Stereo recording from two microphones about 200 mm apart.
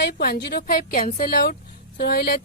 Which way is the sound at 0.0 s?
55° left (ahead or behind).